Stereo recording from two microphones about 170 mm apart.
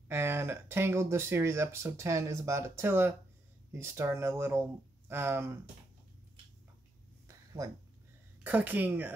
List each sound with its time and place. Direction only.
0.1 s speech: 15° right (ahead or behind)
7.2 s a sound: 20° right (ahead or behind)
8.5 s speech: 10° right (ahead or behind)